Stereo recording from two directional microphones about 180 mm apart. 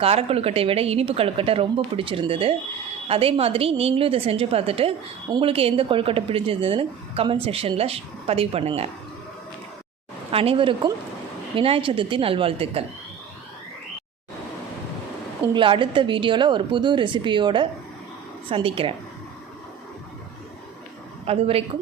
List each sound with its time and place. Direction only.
0.0 s a woman's voice: 35° right (ahead or behind)
10.3 s speech: 30° right (ahead or behind)
15.5 s speech: 30° right (ahead or behind)
21.2 s a woman's voice: 35° right (ahead or behind)